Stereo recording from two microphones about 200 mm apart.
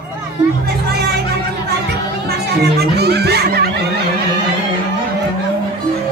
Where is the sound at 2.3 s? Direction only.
55° right (ahead or behind).